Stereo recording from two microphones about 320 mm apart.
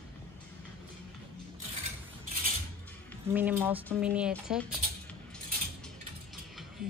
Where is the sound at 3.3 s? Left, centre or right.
Centre.